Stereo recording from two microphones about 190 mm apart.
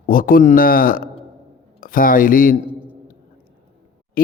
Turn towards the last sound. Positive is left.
turn(degrees=50)  # may be behind; listen again after turning